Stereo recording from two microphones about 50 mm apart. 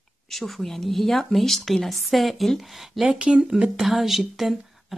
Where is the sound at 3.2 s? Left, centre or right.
Centre.